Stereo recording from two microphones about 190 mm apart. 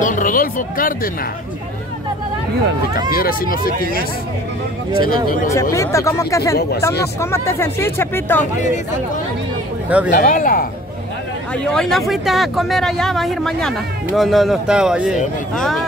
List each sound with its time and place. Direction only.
0.0 s speech: 45° left (ahead or behind)
3.1 s speech: 50° left (ahead or behind)
5.5 s speech: 15° left (ahead or behind)
9.8 s speech: 5° right (ahead or behind)
10.1 s speech: 45° left (ahead or behind)
11.5 s speech: 5° left (ahead or behind)